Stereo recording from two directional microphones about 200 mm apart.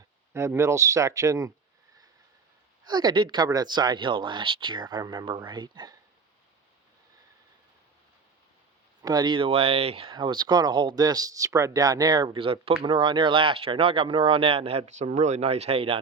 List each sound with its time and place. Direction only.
0.3 s speech: 15° right (ahead or behind)
2.8 s speech: 20° right (ahead or behind)
9.0 s speech: 20° right (ahead or behind)